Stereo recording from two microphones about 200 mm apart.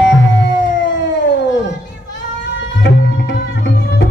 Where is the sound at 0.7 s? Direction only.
65° left (ahead or behind).